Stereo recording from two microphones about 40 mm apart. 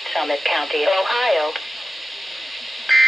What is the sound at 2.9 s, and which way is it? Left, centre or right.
Telephone dialing, centre.